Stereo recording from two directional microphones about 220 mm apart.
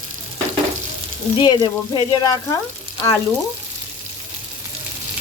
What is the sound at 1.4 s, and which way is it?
Frying, 20° left (ahead or behind).